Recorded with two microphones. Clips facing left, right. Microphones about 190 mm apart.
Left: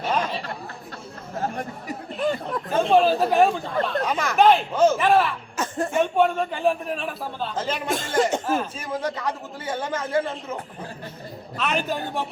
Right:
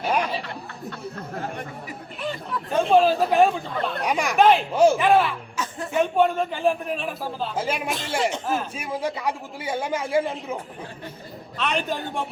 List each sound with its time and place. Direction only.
0.1 s chatter: 10° right (ahead or behind)
1.5 s chatter: 45° left (ahead or behind)
2.7 s chatter: centre (ahead or behind)
4.0 s chatter: 15° right (ahead or behind)
4.4 s speech: centre (ahead or behind)
4.7 s a man's voice: 10° right (ahead or behind)
4.9 s a man's voice: centre (ahead or behind)
5.5 s music: 50° left (ahead or behind)
6.0 s a man's voice: centre (ahead or behind)
7.9 s a man's voice: 50° left (ahead or behind)
8.8 s a man's voice: 10° right (ahead or behind)
11.5 s a man's voice: 5° left (ahead or behind)